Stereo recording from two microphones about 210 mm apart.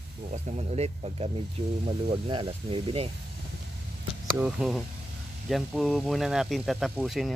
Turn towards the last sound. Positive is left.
turn(degrees=0)  # may be behind; listen again after turning